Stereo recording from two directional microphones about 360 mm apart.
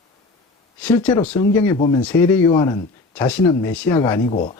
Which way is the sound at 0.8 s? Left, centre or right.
Centre.